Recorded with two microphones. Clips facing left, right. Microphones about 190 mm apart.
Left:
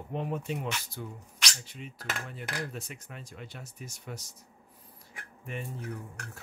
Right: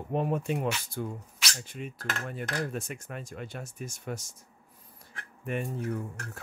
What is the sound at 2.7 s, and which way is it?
Speech, 50° right (ahead or behind).